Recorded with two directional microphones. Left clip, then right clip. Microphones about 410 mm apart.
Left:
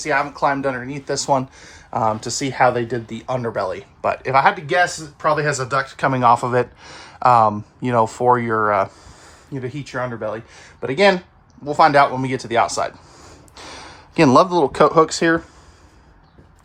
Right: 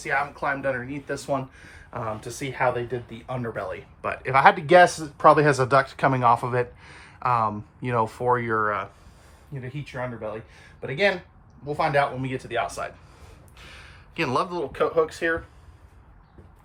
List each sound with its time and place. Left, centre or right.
0.0 s speech: centre